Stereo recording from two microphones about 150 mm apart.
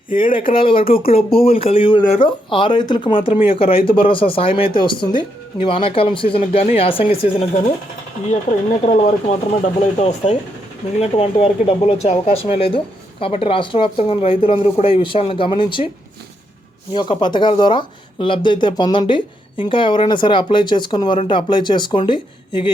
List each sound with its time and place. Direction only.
0.5 s speech: 35° left (ahead or behind)
8.3 s speech: 55° left (ahead or behind); by 15.9 s 35° left (ahead or behind)
16.9 s speech: 30° left (ahead or behind)